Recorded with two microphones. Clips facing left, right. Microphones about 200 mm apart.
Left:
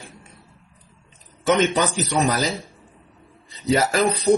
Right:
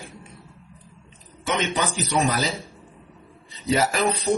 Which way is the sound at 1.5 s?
40° left (ahead or behind).